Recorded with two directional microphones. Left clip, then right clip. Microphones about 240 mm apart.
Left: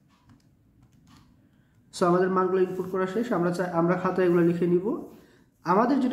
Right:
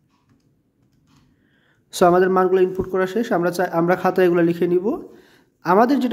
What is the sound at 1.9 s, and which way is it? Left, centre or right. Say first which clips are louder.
A man's voice: right 8 dB; right.